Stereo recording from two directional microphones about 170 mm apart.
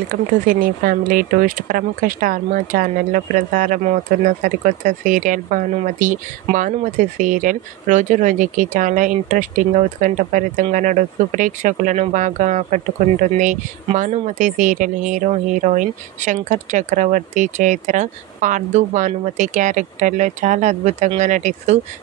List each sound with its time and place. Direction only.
0.1 s speech: 55° right (ahead or behind)
13.9 s speech: 45° right (ahead or behind)